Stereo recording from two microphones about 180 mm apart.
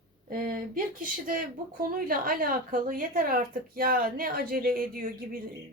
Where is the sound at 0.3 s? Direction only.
50° right (ahead or behind).